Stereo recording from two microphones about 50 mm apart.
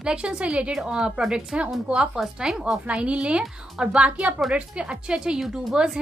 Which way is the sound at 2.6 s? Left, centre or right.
Right.